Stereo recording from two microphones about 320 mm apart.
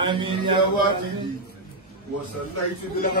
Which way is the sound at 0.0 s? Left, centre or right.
Centre.